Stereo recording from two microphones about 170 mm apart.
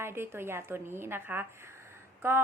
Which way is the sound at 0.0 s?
15° right (ahead or behind).